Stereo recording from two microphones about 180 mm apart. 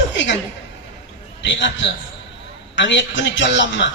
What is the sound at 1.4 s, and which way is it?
Speech, 85° left.